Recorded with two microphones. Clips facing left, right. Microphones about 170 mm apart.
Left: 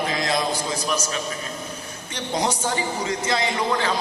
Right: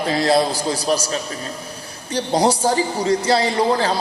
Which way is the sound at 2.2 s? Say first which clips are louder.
Right 7 dB; 35° right (ahead or behind).